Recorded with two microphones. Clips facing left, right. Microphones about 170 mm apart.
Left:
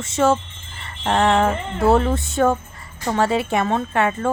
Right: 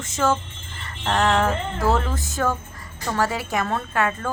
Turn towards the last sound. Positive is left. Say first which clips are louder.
# left 4 dB
turn(degrees=25)  # may be behind; listen again after turning